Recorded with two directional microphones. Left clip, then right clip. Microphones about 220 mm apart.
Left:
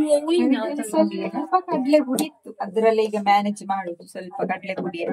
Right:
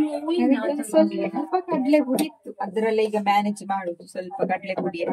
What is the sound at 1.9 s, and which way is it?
Speech, 5° left (ahead or behind).